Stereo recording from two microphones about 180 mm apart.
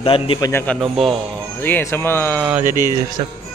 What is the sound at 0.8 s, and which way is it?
Speech, centre (ahead or behind).